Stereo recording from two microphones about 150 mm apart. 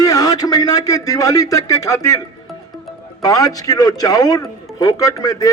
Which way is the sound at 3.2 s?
25° left (ahead or behind).